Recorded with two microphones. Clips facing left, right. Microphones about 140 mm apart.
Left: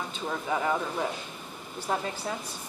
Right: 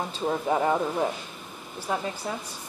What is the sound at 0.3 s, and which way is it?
Speech, 30° right (ahead or behind).